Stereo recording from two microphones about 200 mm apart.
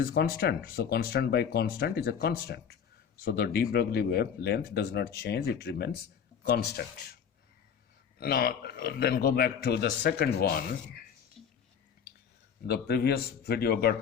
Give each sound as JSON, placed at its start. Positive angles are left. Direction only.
{"t": 0.0, "sound": "a man's voice", "side_deg": 50}
{"t": 8.2, "sound": "a man's voice", "side_deg": 50}
{"t": 11.4, "sound": "whispering", "side_deg": 0}
{"t": 12.6, "sound": "a man's voice", "side_deg": 55}